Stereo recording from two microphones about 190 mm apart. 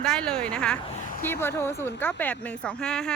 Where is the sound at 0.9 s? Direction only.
40° left (ahead or behind).